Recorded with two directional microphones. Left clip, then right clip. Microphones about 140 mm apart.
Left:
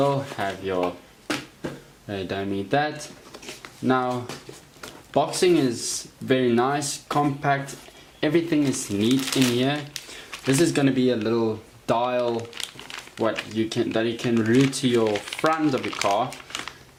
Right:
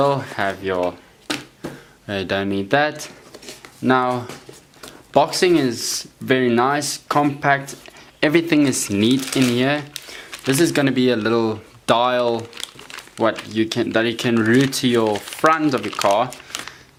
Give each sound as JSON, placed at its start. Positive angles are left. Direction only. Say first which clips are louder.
{"t": 0.0, "sound": "speech", "louder": "right 5 dB", "side_deg": -35}
{"t": 2.0, "sound": "speech", "louder": "right 7 dB", "side_deg": -35}
{"t": 9.0, "sound": "speech", "louder": "right 3 dB", "side_deg": 0}
{"t": 9.6, "sound": "speech", "louder": "right 5 dB", "side_deg": -30}
{"t": 9.9, "sound": "squish", "louder": "right 3 dB", "side_deg": -10}
{"t": 10.5, "sound": "speech", "louder": "right 4 dB", "side_deg": -30}
{"t": 12.4, "sound": "crumpling", "louder": "right 1 dB", "side_deg": -5}
{"t": 13.5, "sound": "speech", "louder": "right 5 dB", "side_deg": -30}
{"t": 15.0, "sound": "speech", "louder": "right 5 dB", "side_deg": -10}
{"t": 16.3, "sound": "crumpling", "louder": "right 2 dB", "side_deg": -10}